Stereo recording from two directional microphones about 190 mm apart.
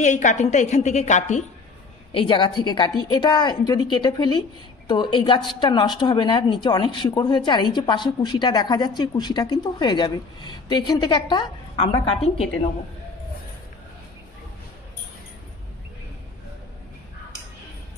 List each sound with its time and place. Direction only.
0.0 s a woman's voice: 40° left (ahead or behind)
2.1 s a woman's voice: 25° left (ahead or behind)